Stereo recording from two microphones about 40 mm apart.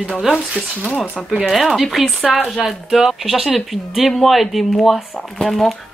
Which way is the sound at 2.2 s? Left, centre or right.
Left.